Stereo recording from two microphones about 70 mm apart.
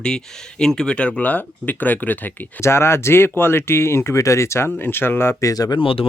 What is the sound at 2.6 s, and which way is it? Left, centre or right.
Speech, left.